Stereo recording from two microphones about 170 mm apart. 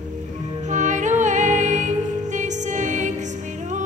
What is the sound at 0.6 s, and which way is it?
Music, 45° right (ahead or behind).